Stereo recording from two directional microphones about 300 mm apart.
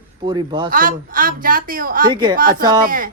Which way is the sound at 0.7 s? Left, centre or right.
Right.